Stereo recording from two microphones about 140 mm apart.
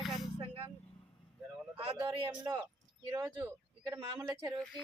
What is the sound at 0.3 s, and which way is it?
Vehicle, 40° right (ahead or behind).